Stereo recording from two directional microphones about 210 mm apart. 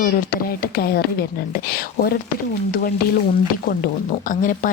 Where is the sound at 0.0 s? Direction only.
45° left (ahead or behind).